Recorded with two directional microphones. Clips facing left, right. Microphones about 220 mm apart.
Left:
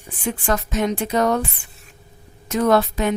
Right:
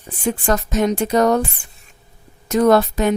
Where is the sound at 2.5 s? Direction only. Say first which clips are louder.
Right 4 dB; 40° right (ahead or behind).